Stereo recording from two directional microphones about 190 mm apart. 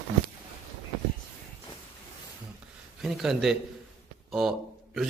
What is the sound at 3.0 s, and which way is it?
Speech, centre (ahead or behind).